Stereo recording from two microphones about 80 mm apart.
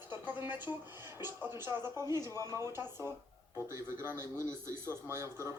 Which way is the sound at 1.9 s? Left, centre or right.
Right.